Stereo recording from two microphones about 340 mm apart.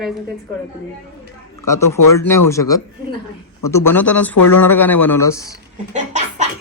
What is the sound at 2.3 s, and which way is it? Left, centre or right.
Speech, centre.